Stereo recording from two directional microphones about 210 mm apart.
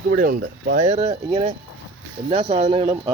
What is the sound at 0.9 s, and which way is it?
A man's voice, 30° right (ahead or behind).